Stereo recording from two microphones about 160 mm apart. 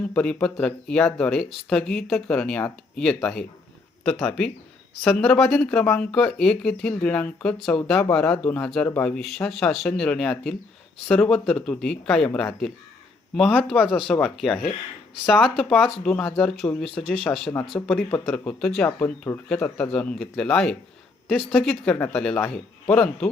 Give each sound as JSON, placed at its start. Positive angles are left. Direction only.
{"t": 0.1, "sound": "speech", "side_deg": 5}